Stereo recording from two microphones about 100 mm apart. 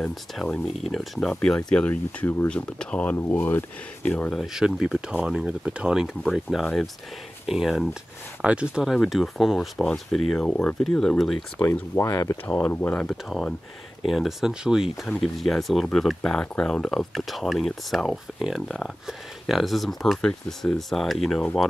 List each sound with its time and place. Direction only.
0.0 s speech: centre (ahead or behind)
3.2 s speech: 25° left (ahead or behind)
4.6 s speech: 5° right (ahead or behind)
11.7 s speech: 25° left (ahead or behind)
12.7 s speech: 20° left (ahead or behind)
13.0 s speech: 5° left (ahead or behind)
15.0 s speech: 5° left (ahead or behind)